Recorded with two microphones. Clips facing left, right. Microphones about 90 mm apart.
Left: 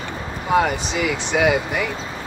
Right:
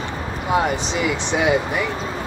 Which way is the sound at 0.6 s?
25° right (ahead or behind).